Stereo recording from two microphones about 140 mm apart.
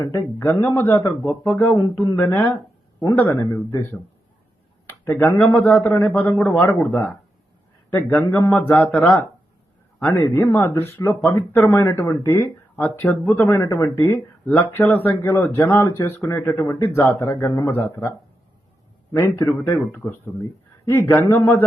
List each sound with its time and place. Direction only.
0.0 s speech: 20° left (ahead or behind)
1.2 s speech: 5° left (ahead or behind)
1.5 s speech: 25° left (ahead or behind)
4.9 s speech: 15° left (ahead or behind)
7.9 s speech: 15° left (ahead or behind)
10.3 s speech: 20° left (ahead or behind)
16.6 s speech: 30° left (ahead or behind)
19.1 s speech: 20° left (ahead or behind)